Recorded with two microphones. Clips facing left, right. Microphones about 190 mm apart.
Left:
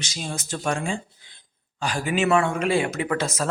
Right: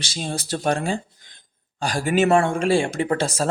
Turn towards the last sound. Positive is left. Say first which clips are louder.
# right 3 dB
turn(degrees=-30)  # may be behind; listen again after turning